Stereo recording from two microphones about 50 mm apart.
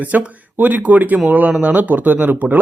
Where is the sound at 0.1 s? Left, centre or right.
Right.